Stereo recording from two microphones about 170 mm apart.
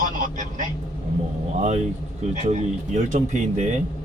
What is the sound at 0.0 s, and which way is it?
Vehicle, 50° right (ahead or behind).